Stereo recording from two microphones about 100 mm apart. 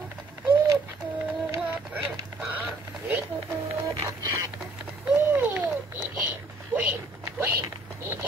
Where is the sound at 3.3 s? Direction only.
30° right (ahead or behind).